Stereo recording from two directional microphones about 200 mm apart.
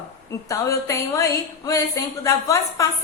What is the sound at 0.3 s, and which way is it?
A woman's voice, 15° left (ahead or behind).